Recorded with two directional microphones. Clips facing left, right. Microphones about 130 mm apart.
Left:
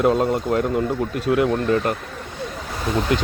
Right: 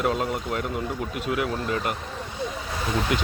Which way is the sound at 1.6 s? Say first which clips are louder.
Left 7 dB; 40° left (ahead or behind).